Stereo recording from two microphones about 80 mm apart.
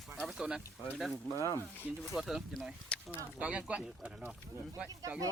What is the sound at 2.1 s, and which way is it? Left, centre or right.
Speech, centre.